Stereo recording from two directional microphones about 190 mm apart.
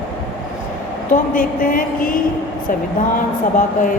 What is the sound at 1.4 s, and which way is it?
Speech, 50° left (ahead or behind).